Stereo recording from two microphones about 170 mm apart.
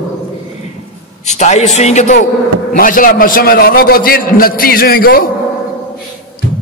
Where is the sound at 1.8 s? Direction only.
40° left (ahead or behind).